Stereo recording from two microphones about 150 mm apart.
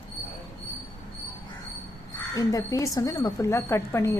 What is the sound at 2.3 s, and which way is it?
A woman's voice, 20° left (ahead or behind).